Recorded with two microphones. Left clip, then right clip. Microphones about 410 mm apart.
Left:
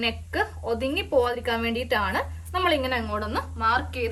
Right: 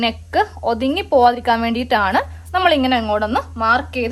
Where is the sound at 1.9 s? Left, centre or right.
Right.